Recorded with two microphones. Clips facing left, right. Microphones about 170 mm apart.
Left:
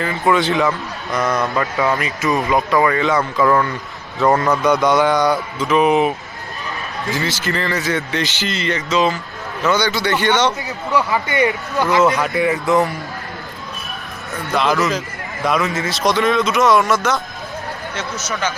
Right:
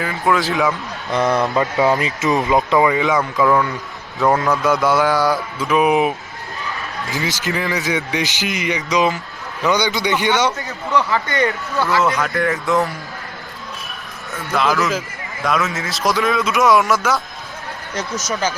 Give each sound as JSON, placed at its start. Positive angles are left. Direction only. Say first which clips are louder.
{"t": 0.0, "sound": "speech", "louder": "left 2 dB", "side_deg": 0}
{"t": 1.1, "sound": "a man's voice", "louder": "right 2 dB", "side_deg": -30}
{"t": 10.7, "sound": "a man's voice", "louder": "even", "side_deg": 15}
{"t": 12.2, "sound": "speech", "louder": "left 2 dB", "side_deg": 5}
{"t": 14.5, "sound": "speech", "louder": "left 1 dB", "side_deg": 0}